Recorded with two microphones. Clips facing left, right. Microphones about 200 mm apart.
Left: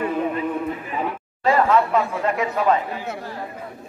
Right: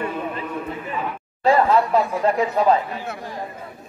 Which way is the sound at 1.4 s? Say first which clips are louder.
Right 1 dB; 35° right (ahead or behind).